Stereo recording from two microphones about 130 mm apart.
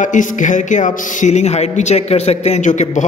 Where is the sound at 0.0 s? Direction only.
80° left.